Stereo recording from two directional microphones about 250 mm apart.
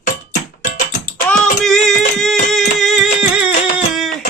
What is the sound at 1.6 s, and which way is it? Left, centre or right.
Music, centre.